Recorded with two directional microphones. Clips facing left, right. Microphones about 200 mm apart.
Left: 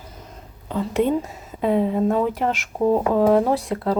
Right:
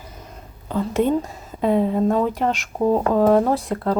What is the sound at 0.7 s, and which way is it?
Speech, centre (ahead or behind).